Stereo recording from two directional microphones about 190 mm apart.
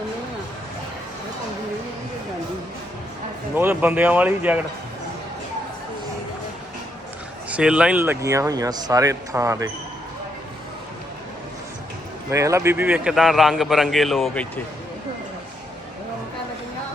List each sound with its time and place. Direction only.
3.5 s speech: 10° right (ahead or behind)
7.5 s speech: 5° right (ahead or behind)
12.3 s a man's voice: 15° right (ahead or behind); by 14.6 s 5° left (ahead or behind)